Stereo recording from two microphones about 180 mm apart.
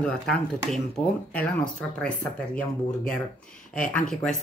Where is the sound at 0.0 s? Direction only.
5° left (ahead or behind).